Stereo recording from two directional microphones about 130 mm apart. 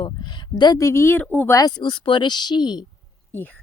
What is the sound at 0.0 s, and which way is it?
Speech, 35° left (ahead or behind).